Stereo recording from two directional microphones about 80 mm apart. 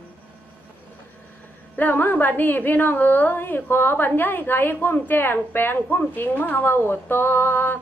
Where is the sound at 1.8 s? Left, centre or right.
Left.